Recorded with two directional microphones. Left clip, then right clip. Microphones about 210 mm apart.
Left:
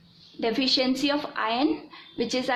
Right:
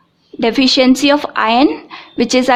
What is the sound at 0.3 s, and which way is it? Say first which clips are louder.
A woman's voice: right 12 dB; 50° right (ahead or behind).